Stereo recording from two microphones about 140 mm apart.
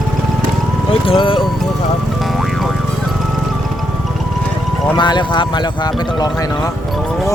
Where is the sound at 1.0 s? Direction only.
40° left (ahead or behind).